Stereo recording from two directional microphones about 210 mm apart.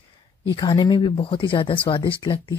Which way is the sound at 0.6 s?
20° left (ahead or behind).